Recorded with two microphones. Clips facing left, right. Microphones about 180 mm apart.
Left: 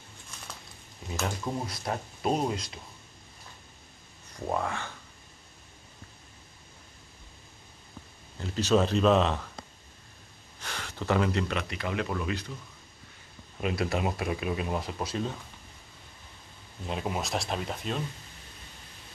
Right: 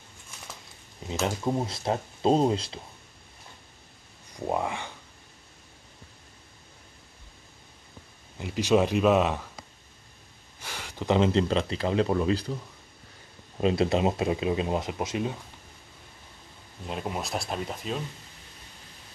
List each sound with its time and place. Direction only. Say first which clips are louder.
1.2 s speech: right 5 dB; 25° right (ahead or behind)
4.3 s speech: right 2 dB; 15° right (ahead or behind)
8.4 s speech: right 2 dB; 10° right (ahead or behind)
10.6 s speech: right 1 dB; 10° right (ahead or behind); by 12.5 s 30° right (ahead or behind)
13.6 s speech: right 6 dB; 25° right (ahead or behind)
16.8 s speech: even; centre (ahead or behind)